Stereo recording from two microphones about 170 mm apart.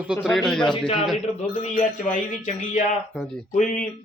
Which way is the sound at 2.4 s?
45° left (ahead or behind).